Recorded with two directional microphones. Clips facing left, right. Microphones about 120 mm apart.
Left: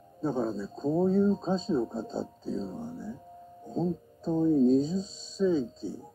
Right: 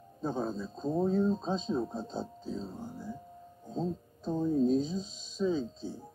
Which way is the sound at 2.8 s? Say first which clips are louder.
Left 4 dB; 15° right (ahead or behind).